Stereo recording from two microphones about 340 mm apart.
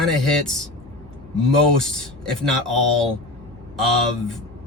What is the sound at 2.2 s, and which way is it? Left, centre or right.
Speech, centre.